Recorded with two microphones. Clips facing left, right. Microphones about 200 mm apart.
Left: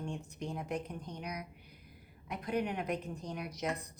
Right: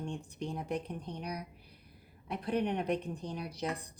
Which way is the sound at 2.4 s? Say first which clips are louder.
Right 3 dB; 30° right (ahead or behind).